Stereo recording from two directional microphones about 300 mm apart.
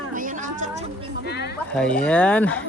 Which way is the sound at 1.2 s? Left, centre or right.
Left.